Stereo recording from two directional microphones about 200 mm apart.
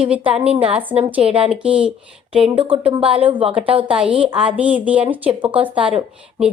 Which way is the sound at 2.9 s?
25° right (ahead or behind).